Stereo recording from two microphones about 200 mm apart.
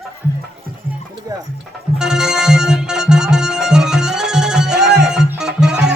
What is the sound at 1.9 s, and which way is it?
Music, 5° right (ahead or behind).